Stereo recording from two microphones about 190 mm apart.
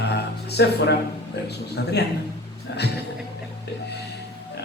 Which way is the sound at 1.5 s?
60° left (ahead or behind).